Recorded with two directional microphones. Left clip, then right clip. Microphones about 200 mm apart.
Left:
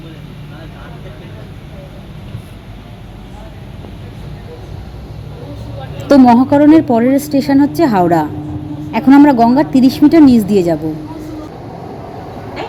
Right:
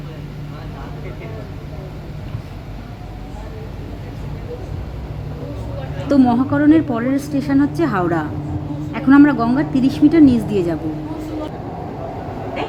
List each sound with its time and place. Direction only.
6.1 s a woman's voice: centre (ahead or behind)
6.5 s a woman's voice: 20° left (ahead or behind)